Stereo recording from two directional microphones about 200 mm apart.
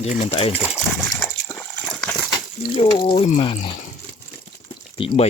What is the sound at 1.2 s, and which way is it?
Water, 5° left (ahead or behind).